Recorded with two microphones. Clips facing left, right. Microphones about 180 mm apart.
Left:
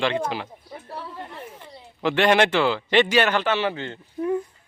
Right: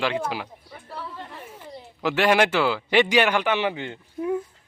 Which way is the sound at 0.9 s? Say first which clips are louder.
Even; 15° left (ahead or behind).